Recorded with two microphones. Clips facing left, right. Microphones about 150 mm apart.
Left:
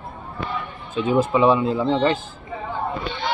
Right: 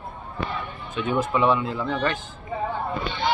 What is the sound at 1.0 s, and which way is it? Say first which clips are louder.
Speech: left 5 dB; 25° left (ahead or behind).